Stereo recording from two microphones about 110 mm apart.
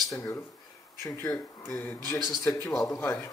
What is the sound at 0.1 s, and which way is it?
Speech, 30° left (ahead or behind).